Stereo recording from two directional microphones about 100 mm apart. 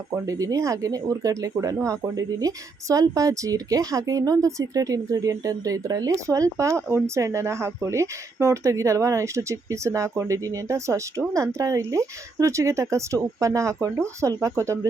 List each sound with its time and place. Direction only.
0.3 s speech: 35° right (ahead or behind)